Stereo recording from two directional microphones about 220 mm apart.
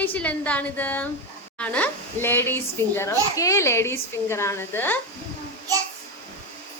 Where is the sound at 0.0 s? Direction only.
5° left (ahead or behind).